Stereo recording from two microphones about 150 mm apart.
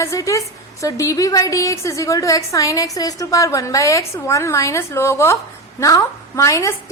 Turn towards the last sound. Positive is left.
turn(degrees=20)  # may be behind; listen again after turning